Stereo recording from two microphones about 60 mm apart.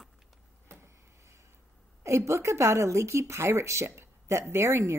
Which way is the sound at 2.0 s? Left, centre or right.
Right.